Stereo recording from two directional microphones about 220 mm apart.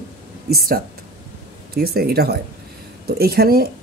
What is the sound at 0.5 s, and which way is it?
Speech, 40° right (ahead or behind).